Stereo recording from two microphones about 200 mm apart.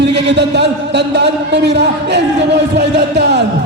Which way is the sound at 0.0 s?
60° right (ahead or behind).